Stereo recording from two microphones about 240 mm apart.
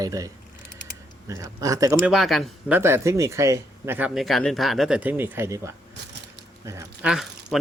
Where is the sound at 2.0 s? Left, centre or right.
Centre.